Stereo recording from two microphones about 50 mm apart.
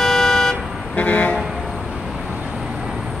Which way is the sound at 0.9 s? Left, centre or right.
Left.